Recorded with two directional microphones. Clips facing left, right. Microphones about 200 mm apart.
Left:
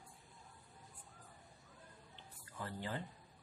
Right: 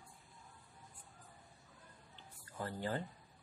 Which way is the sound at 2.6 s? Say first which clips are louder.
Right 4 dB; 40° right (ahead or behind).